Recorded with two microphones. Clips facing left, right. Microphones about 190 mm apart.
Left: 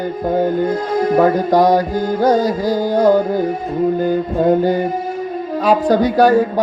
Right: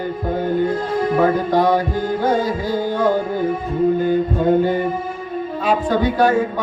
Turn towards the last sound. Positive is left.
turn(degrees=40)  # may be behind; listen again after turning